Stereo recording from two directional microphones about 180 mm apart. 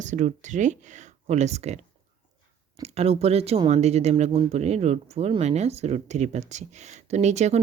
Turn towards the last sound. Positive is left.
turn(degrees=-40)  # may be behind; listen again after turning